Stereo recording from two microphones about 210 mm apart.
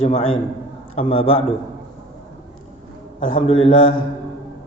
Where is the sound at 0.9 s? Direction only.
25° left (ahead or behind).